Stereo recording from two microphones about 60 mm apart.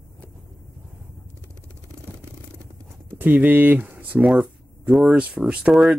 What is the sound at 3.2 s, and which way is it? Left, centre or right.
Speech, right.